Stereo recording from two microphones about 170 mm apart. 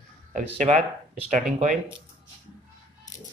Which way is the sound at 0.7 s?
25° right (ahead or behind).